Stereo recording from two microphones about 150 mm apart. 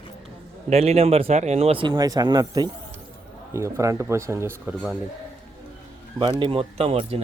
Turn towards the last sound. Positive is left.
turn(degrees=-40)  # may be behind; listen again after turning